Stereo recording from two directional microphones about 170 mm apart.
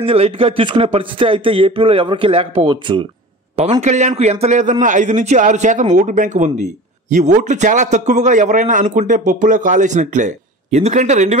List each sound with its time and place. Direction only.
0.0 s speech: 35° right (ahead or behind)
3.8 s speech: 45° right (ahead or behind)